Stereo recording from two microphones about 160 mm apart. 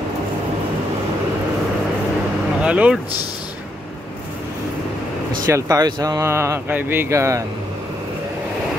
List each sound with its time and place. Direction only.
2.6 s speech: 10° right (ahead or behind)
5.5 s speech: 25° right (ahead or behind)